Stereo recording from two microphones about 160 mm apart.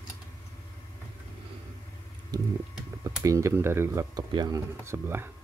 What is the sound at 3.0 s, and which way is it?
Speech, 20° right (ahead or behind).